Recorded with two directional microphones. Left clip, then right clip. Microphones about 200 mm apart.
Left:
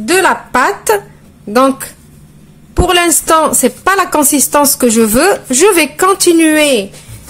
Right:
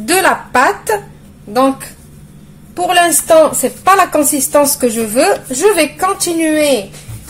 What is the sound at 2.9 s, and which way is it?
A woman's voice, 35° left (ahead or behind).